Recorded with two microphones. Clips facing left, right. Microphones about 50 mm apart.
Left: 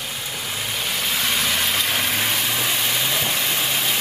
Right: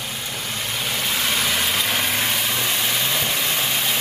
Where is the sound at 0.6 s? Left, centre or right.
Centre.